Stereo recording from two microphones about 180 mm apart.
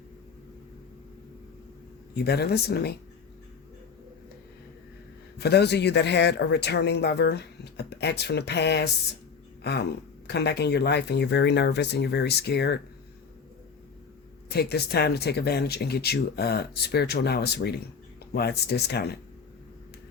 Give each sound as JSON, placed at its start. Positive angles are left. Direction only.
{"t": 2.1, "sound": "speech", "side_deg": 60}
{"t": 5.4, "sound": "speech", "side_deg": 65}
{"t": 14.5, "sound": "speech", "side_deg": 60}